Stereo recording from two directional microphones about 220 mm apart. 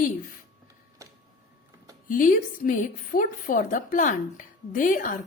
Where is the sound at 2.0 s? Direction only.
40° left (ahead or behind).